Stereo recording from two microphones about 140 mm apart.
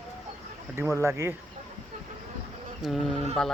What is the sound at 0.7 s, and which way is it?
Speech, 20° right (ahead or behind).